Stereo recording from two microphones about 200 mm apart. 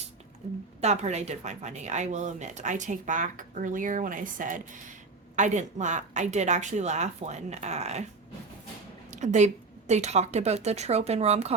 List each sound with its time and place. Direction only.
0.8 s speech: 35° right (ahead or behind)
9.0 s speech: 35° right (ahead or behind)